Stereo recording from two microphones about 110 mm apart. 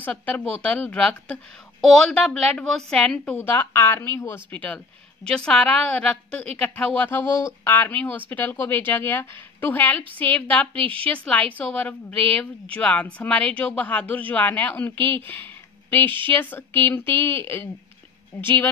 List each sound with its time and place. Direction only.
0.0 s a woman's voice: 15° left (ahead or behind)
3.3 s a woman's voice: 20° left (ahead or behind)